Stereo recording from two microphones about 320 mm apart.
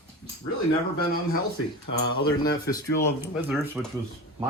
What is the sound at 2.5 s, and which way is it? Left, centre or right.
Speech, left.